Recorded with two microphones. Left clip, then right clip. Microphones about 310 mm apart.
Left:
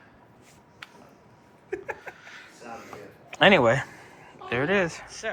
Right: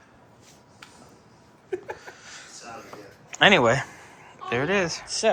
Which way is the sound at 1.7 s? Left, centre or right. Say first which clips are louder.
Right 1 dB; centre.